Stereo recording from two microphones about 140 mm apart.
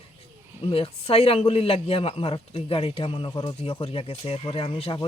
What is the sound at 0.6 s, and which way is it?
A man's voice, 40° left (ahead or behind).